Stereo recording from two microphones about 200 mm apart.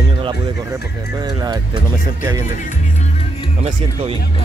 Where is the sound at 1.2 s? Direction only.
20° right (ahead or behind).